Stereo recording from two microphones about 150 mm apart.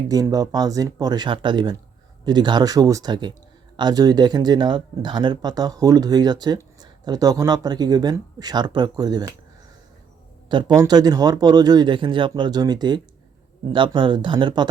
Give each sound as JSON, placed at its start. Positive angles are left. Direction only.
{"t": 0.1, "sound": "speech", "side_deg": -25}
{"t": 10.5, "sound": "speech", "side_deg": -30}